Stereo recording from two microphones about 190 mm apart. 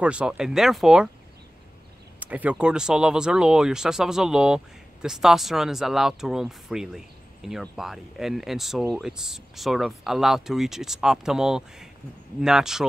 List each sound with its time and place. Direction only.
0.0 s speech: 5° right (ahead or behind)
2.1 s speech: 10° right (ahead or behind)